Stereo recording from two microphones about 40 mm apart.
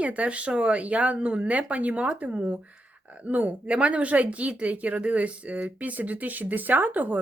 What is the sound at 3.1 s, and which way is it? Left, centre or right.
Speech, right.